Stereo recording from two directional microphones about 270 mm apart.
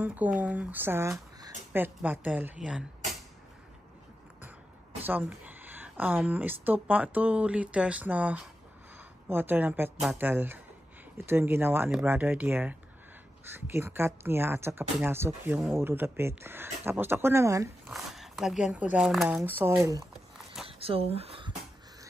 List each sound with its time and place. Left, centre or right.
0.0 s speech: centre
5.0 s speech: centre
17.9 s speech: centre
20.6 s a sound: right